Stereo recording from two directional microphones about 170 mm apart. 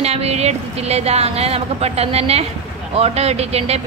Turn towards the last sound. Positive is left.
turn(degrees=-40)  # may be behind; listen again after turning